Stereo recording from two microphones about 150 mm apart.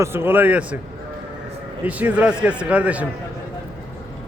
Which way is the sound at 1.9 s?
10° right (ahead or behind).